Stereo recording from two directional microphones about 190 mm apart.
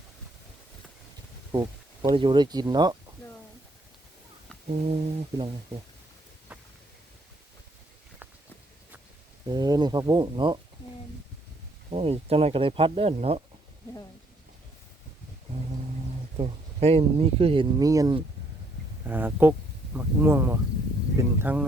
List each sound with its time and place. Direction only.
1.5 s speech: 25° right (ahead or behind)
4.7 s speech: 35° right (ahead or behind)
9.5 s speech: 20° right (ahead or behind)
11.9 s speech: 30° right (ahead or behind)
16.4 s speech: 30° right (ahead or behind); by 21.6 s 10° right (ahead or behind)